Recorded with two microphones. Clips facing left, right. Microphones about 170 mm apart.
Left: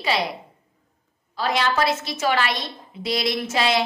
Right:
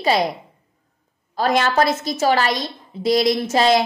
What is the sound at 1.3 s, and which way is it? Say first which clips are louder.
A woman's voice: right 5 dB; 45° right (ahead or behind).